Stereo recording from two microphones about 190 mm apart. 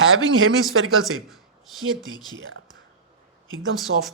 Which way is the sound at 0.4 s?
90° right.